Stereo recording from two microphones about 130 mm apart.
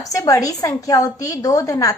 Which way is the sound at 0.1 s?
25° left (ahead or behind).